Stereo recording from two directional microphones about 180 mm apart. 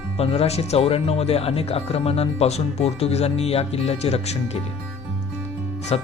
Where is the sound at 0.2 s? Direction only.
35° left (ahead or behind).